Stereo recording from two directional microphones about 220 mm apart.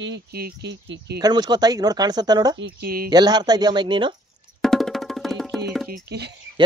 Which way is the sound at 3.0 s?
20° right (ahead or behind).